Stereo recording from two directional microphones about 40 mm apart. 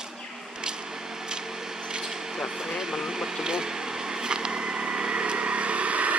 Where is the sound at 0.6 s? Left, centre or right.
Centre; by 6.2 s right.